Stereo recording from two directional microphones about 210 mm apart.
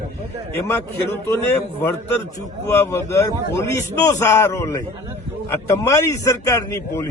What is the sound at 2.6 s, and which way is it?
A man's voice, 10° left (ahead or behind).